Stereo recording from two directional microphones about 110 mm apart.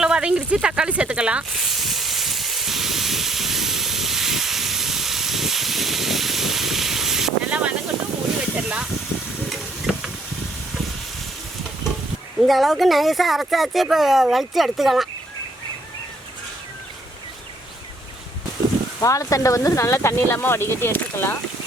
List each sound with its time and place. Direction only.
0.0 s sizzle: 10° right (ahead or behind)
8.5 s speech: 10° right (ahead or behind)
9.5 s sizzle: centre (ahead or behind)
12.4 s speech: centre (ahead or behind)
18.9 s speech: 30° left (ahead or behind)